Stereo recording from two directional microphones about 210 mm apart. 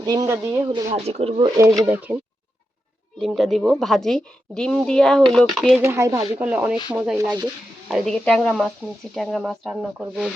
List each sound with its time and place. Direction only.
0.0 s speech: 20° right (ahead or behind)
0.9 s speech: 30° right (ahead or behind)
1.8 s speech: 10° right (ahead or behind)
3.2 s a woman's voice: centre (ahead or behind)
5.8 s a woman's voice: 15° right (ahead or behind)